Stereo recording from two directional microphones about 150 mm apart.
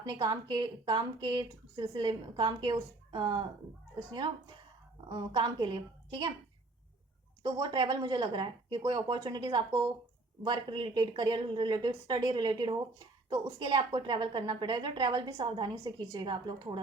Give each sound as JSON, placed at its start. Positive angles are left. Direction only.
{"t": 0.0, "sound": "speech", "side_deg": -30}
{"t": 7.5, "sound": "speech", "side_deg": -30}